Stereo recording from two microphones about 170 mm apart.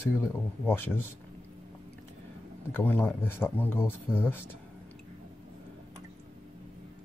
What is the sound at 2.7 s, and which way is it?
Speech, 10° left (ahead or behind).